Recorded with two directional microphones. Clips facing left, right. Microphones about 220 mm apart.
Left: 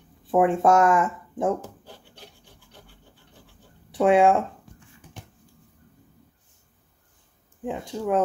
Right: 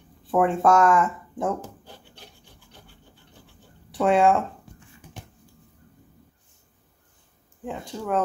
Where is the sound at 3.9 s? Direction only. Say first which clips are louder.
Left 2 dB; 15° left (ahead or behind).